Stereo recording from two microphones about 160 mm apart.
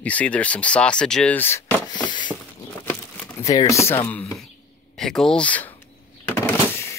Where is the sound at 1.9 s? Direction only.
30° left (ahead or behind).